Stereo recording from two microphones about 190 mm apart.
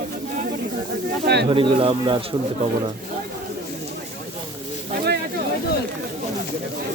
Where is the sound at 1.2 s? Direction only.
65° right (ahead or behind).